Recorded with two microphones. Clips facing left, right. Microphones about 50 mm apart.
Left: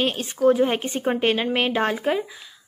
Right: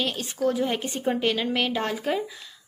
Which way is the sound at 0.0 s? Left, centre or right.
Left.